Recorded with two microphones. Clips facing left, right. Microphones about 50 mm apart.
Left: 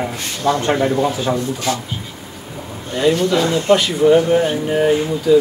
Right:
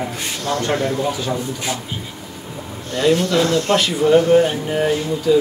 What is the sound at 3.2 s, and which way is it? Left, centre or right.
Speech, centre.